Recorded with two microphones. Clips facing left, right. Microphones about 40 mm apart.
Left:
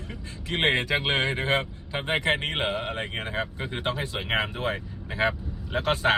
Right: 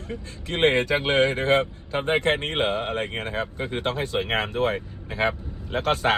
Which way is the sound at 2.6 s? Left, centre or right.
Centre.